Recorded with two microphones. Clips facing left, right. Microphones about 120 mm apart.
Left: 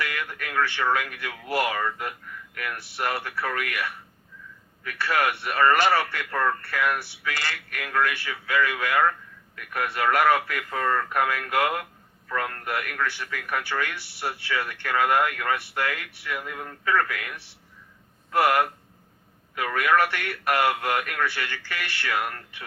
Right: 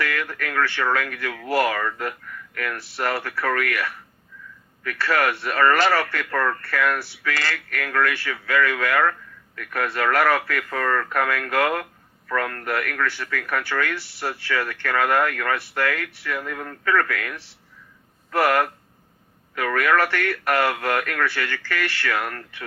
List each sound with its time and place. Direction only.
0.0 s speech: 15° left (ahead or behind)
10.7 s speech: 30° left (ahead or behind)
11.1 s speech: 15° left (ahead or behind)
16.5 s speech: 65° right (ahead or behind)
16.8 s speech: 15° left (ahead or behind)
18.3 s speech: 15° left (ahead or behind)